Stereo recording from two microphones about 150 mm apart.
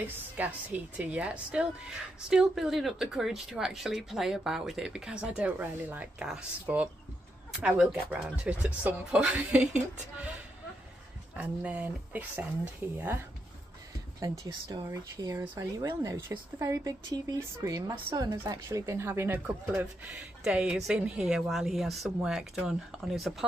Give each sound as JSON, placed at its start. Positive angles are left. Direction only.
{"t": 0.0, "sound": "speech", "side_deg": -10}
{"t": 11.3, "sound": "speech", "side_deg": -10}
{"t": 14.4, "sound": "speech", "side_deg": -25}